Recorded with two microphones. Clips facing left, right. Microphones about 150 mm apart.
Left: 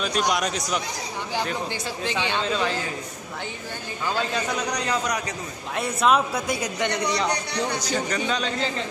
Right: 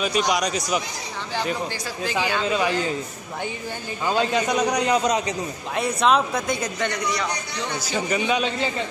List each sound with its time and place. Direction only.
0.0 s a woman's voice: centre (ahead or behind)
2.4 s a man's voice: 10° right (ahead or behind)
4.0 s a man's voice: 15° right (ahead or behind)
5.8 s a woman's voice: 5° left (ahead or behind)
7.8 s a man's voice: 10° right (ahead or behind)